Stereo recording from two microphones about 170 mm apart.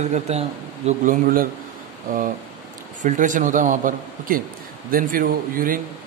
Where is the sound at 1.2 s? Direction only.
55° right (ahead or behind).